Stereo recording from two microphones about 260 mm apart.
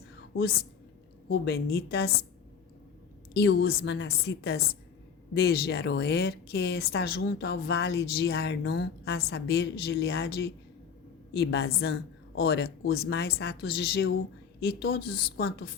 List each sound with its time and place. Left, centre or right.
0.3 s speech: left
3.3 s speech: left